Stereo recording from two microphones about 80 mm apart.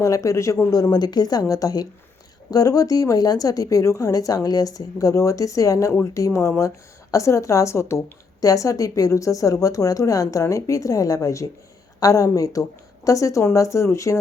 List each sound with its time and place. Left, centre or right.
0.0 s speech: left
0.7 s a woman's voice: left